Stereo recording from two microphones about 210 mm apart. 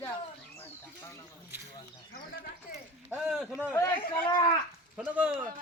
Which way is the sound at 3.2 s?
Centre (ahead or behind).